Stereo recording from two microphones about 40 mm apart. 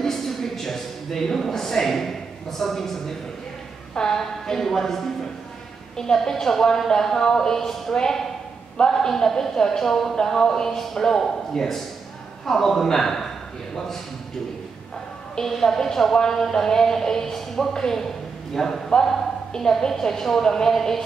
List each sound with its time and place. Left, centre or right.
0.0 s a sound: centre
2.6 s speech: centre
6.1 s speech: centre
15.4 s speech: centre